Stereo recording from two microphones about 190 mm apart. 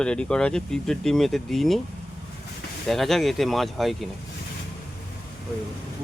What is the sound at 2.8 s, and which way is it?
Speech, centre (ahead or behind).